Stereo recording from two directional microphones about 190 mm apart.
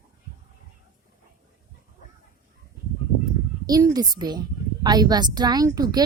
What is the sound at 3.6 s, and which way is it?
A woman's voice, 20° right (ahead or behind).